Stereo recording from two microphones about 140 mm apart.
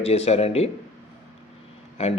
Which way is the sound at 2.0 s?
50° left (ahead or behind).